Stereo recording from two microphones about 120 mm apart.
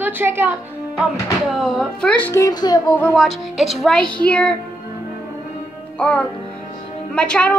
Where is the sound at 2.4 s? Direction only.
35° left (ahead or behind).